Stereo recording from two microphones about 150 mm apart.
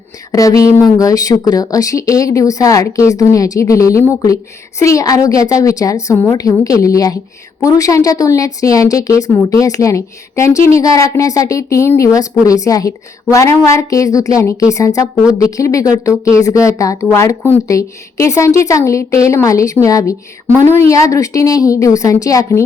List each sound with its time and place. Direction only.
0.3 s speech: 20° left (ahead or behind)